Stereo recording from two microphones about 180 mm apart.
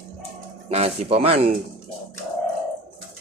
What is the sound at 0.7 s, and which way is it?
Speech, 35° right (ahead or behind).